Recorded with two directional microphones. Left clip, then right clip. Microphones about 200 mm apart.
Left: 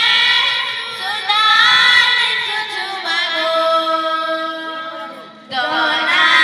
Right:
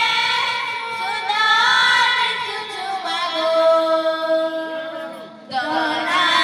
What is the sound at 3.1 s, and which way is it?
Singing, 35° right (ahead or behind).